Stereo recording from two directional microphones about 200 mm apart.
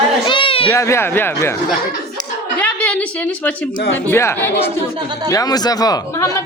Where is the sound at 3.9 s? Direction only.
10° left (ahead or behind).